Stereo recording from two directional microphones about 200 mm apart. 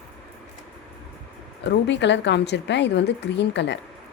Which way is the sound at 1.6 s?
60° left (ahead or behind).